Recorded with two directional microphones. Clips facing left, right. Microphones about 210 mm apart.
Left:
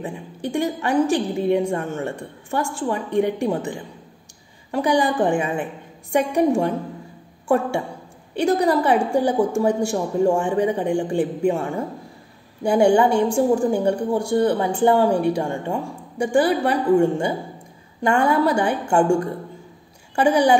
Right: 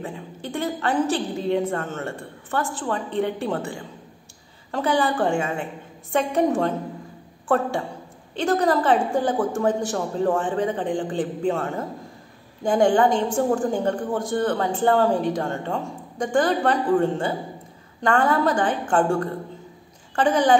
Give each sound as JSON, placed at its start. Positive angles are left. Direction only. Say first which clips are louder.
{"t": 0.0, "sound": "a woman's voice", "louder": "left 4 dB", "side_deg": 15}